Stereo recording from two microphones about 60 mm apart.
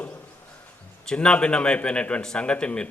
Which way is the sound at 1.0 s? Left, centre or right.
Centre.